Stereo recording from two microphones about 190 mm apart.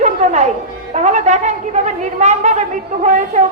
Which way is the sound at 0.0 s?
35° right (ahead or behind).